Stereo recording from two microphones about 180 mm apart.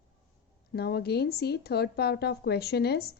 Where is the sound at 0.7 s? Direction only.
60° left (ahead or behind).